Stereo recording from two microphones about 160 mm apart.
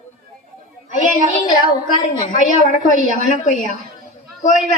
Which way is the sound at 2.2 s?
50° left (ahead or behind).